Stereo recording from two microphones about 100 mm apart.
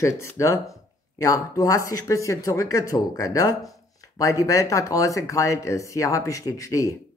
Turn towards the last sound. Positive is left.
turn(degrees=35)  # may be behind; listen again after turning